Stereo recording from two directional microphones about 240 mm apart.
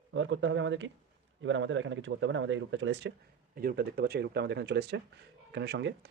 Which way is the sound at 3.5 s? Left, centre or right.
Right.